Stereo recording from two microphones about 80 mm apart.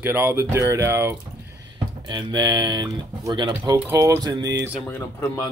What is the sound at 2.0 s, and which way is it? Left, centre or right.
Speech, right.